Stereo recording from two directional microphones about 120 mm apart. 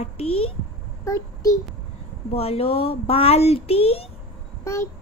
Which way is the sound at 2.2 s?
55° left (ahead or behind).